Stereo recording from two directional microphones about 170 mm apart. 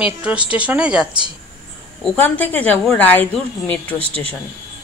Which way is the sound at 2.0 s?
10° left (ahead or behind).